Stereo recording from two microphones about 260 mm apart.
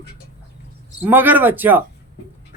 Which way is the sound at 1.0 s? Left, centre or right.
Centre.